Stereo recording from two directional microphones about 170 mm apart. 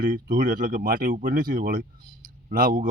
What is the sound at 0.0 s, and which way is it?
Speech, 55° right (ahead or behind).